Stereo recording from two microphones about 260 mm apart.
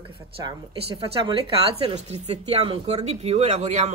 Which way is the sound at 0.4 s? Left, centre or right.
Centre.